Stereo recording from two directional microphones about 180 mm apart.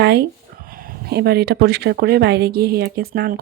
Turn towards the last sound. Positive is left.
turn(degrees=-55)  # may be behind; listen again after turning